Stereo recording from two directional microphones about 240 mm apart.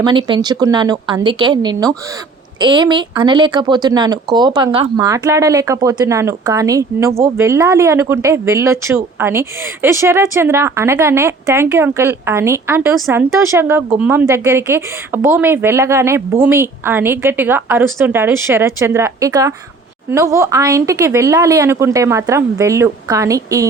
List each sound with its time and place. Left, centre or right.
0.0 s a woman's voice: centre